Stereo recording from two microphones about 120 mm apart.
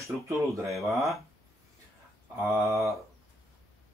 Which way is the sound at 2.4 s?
25° right (ahead or behind).